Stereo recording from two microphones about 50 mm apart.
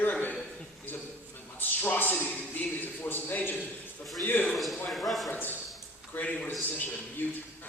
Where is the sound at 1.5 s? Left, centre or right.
Left.